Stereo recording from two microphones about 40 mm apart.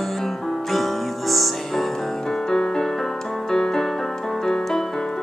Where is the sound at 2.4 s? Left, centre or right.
Centre.